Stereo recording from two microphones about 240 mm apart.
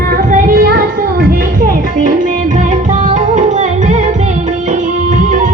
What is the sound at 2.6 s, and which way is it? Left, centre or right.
Music, right.